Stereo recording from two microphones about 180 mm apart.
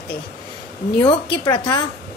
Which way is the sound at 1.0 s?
25° left (ahead or behind).